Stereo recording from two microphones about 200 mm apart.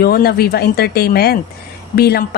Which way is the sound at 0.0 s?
50° left (ahead or behind).